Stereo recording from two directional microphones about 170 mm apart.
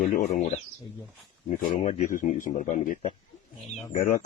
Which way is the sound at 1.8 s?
45° left (ahead or behind).